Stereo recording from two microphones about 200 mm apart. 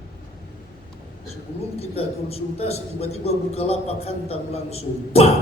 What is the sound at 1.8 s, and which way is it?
A man's voice, 30° left (ahead or behind).